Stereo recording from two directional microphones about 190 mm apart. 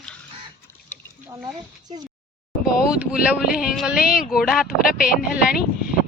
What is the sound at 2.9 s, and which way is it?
Speech, 5° right (ahead or behind).